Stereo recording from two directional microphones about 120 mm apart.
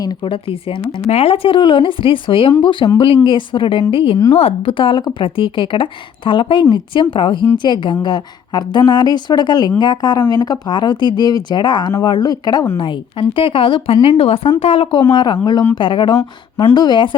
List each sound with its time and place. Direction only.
1.0 s a woman's voice: 60° left (ahead or behind)
15.1 s speech: 40° left (ahead or behind)
16.1 s speech: 25° left (ahead or behind)
16.7 s speech: 40° left (ahead or behind)